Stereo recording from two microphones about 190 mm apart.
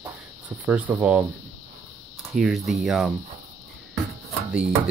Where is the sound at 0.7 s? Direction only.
5° right (ahead or behind).